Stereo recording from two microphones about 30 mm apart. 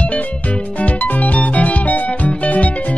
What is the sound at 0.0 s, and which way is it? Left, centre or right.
Music, left.